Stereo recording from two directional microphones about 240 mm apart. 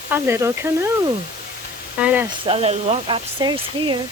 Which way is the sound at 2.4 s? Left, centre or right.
Right.